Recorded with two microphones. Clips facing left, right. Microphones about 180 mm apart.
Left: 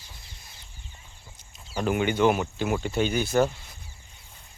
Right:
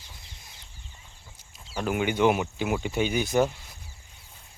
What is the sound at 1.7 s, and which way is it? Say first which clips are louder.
Speech: left 2 dB; 5° right (ahead or behind).